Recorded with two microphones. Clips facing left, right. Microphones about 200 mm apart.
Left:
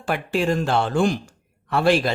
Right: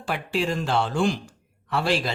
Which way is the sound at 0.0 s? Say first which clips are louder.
Left 4 dB; 50° left (ahead or behind).